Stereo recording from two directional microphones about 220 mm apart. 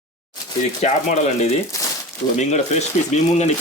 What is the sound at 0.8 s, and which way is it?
Speech, 30° left (ahead or behind).